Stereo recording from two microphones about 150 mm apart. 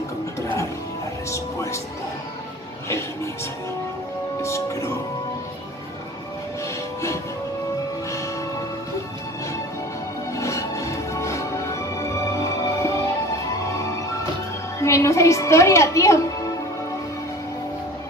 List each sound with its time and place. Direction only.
1.3 s music: 20° left (ahead or behind)
4.4 s music: 20° left (ahead or behind)
10.3 s music: 20° left (ahead or behind)
14.8 s a woman's voice: 20° left (ahead or behind)